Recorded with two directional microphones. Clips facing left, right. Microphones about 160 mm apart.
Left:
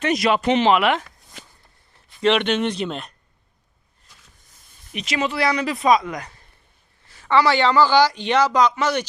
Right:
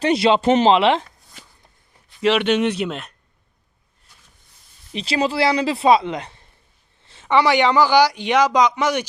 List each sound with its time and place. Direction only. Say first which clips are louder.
0.0 s speech: right 3 dB; 30° right (ahead or behind)
2.2 s speech: right 2 dB; 5° right (ahead or behind)
4.9 s speech: right 3 dB; 35° right (ahead or behind); by 9.0 s 10° right (ahead or behind)